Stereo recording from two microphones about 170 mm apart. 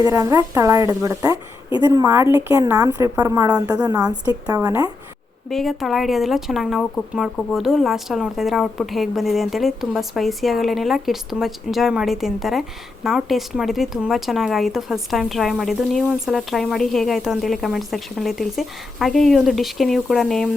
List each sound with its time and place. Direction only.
0.0 s a woman's voice: 20° right (ahead or behind)
5.5 s speech: centre (ahead or behind)